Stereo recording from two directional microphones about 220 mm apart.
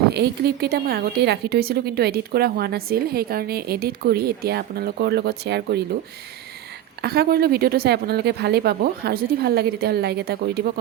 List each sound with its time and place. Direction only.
0.1 s a woman's voice: 45° right (ahead or behind)
7.0 s a woman's voice: 45° right (ahead or behind)